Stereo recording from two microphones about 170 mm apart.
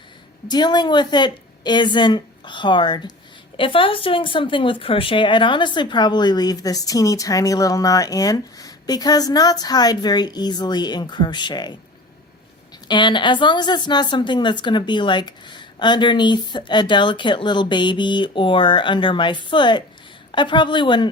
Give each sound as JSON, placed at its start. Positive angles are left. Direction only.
{"t": 0.4, "sound": "speech", "side_deg": 25}
{"t": 12.9, "sound": "speech", "side_deg": 25}